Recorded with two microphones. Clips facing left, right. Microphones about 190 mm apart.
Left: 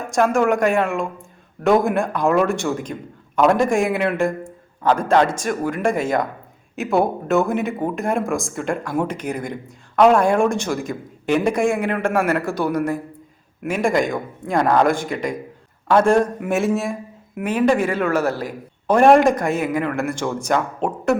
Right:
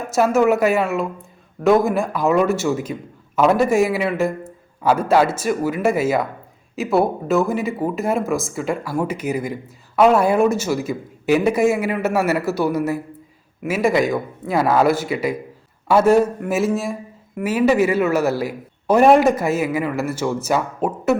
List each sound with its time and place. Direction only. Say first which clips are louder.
0.1 s a man's voice: right 2 dB; 5° right (ahead or behind)